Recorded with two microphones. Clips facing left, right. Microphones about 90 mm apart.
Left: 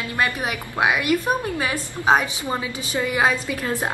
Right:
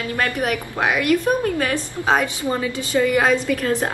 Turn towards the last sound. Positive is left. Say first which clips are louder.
# right 3 dB
turn(degrees=20)  # may be behind; listen again after turning